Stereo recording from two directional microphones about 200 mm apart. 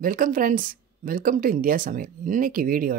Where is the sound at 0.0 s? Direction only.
45° right (ahead or behind).